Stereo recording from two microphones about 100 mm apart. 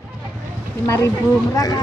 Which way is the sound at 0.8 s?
25° left (ahead or behind).